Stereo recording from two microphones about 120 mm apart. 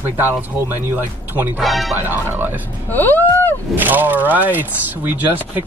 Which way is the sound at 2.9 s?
15° left (ahead or behind).